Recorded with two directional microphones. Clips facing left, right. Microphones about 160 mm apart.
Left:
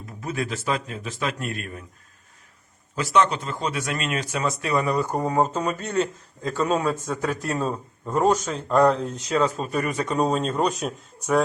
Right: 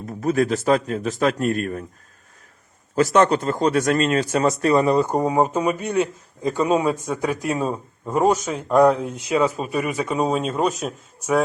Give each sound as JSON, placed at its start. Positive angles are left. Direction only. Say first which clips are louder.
{"t": 0.0, "sound": "speech", "louder": "right 9 dB", "side_deg": -40}
{"t": 2.9, "sound": "speech", "louder": "right 5 dB", "side_deg": -45}